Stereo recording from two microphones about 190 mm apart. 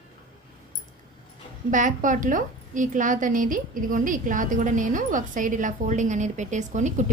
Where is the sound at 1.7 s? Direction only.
40° right (ahead or behind).